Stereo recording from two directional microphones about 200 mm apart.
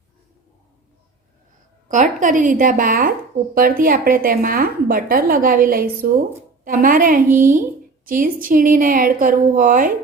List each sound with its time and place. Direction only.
1.9 s a woman's voice: 40° right (ahead or behind)